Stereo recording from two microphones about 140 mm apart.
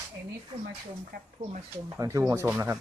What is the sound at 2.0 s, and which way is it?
Speech, 20° right (ahead or behind).